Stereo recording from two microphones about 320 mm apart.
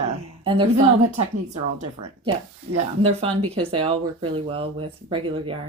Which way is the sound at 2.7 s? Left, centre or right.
Right.